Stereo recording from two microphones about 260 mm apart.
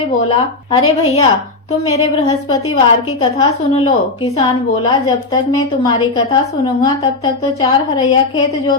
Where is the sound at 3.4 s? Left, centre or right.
Left.